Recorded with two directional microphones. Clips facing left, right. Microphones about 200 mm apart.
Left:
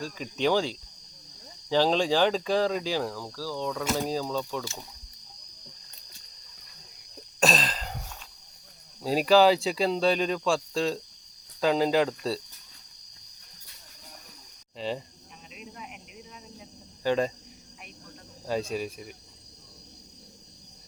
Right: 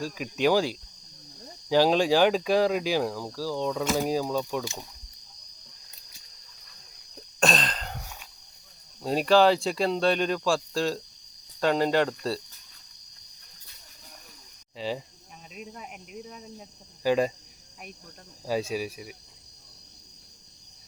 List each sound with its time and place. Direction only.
0.0 s speech: 10° right (ahead or behind)
7.3 s throat clearing: 5° left (ahead or behind)
9.0 s speech: centre (ahead or behind)
14.8 s speech: 5° right (ahead or behind)
15.5 s cricket: 45° right (ahead or behind)
17.0 s cricket: 10° right (ahead or behind)
18.4 s speech: 5° right (ahead or behind)